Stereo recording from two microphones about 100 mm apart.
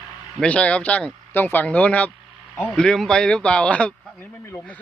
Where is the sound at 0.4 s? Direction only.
10° left (ahead or behind).